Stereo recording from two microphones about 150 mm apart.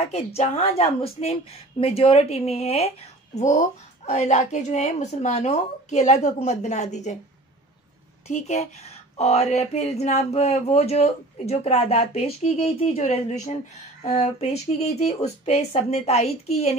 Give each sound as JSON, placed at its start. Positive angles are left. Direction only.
{"t": 0.1, "sound": "speech", "side_deg": 45}
{"t": 8.3, "sound": "speech", "side_deg": 50}